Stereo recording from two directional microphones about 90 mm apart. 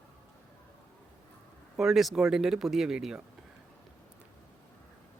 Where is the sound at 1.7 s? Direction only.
5° right (ahead or behind).